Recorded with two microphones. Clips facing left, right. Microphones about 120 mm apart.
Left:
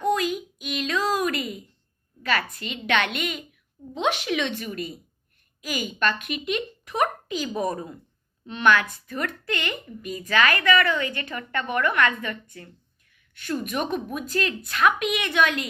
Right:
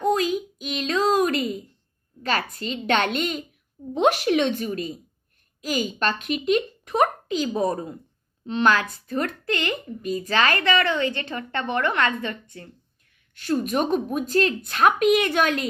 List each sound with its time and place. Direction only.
0.0 s a sound: 35° right (ahead or behind)
2.2 s a woman's voice: 35° right (ahead or behind)
13.3 s speech: 35° right (ahead or behind)